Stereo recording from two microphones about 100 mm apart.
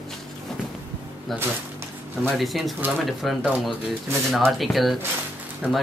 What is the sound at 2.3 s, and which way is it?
Speech, centre (ahead or behind).